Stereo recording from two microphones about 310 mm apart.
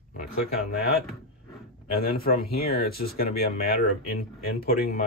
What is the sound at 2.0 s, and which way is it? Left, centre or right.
Speech, left.